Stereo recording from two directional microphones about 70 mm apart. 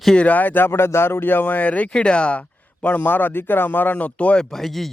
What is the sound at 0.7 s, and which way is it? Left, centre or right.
Speech, left.